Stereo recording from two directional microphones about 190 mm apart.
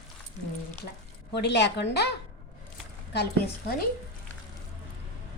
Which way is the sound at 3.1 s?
55° left (ahead or behind).